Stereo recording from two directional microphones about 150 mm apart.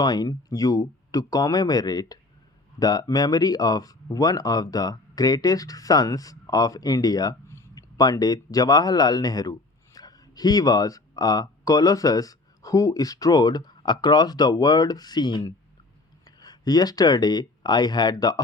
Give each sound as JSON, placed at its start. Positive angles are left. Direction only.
{"t": 0.0, "sound": "speech", "side_deg": 25}